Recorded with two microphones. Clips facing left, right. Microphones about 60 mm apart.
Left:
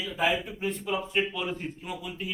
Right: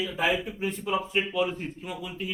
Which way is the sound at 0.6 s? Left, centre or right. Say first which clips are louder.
Right 2 dB; centre.